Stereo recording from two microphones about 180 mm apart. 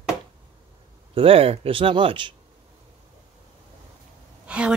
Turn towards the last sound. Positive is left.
turn(degrees=-5)  # may be behind; listen again after turning